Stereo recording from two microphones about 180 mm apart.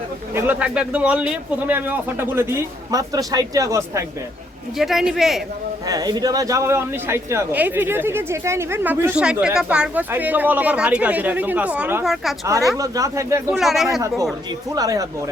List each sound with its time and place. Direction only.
0.3 s speech: 10° right (ahead or behind)
4.8 s speech: centre (ahead or behind)
5.9 s speech: 20° right (ahead or behind); by 12.3 s centre (ahead or behind)
12.7 s speech: 20° right (ahead or behind)
13.5 s speech: centre (ahead or behind)
14.8 s speech: 20° right (ahead or behind)